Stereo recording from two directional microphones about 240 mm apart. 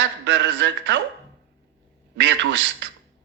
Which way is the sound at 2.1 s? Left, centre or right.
Right.